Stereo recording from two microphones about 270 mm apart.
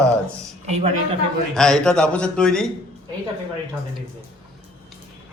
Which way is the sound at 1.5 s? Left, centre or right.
Centre.